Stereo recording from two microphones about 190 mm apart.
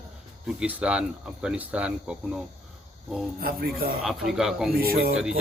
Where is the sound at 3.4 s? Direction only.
50° right (ahead or behind).